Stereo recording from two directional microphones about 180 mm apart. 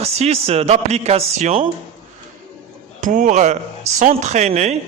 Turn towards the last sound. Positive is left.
turn(degrees=-40)  # may be behind; listen again after turning